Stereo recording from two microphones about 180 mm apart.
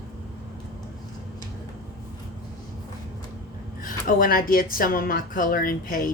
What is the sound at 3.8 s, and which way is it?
A woman's voice, 50° left (ahead or behind).